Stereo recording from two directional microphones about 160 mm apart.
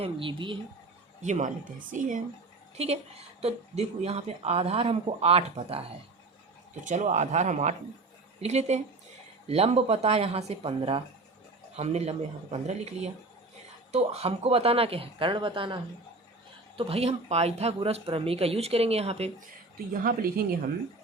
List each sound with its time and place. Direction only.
0.0 s speech: 35° right (ahead or behind)
1.2 s speech: 50° right (ahead or behind)
2.7 s speech: 40° right (ahead or behind)
6.8 s speech: 50° right (ahead or behind)
20.0 s a woman's voice: 65° right (ahead or behind)